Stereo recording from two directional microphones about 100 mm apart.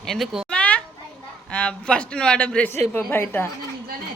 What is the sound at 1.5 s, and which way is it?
A woman's voice, 10° left (ahead or behind).